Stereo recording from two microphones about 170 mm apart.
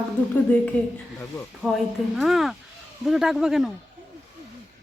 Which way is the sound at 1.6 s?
Centre (ahead or behind).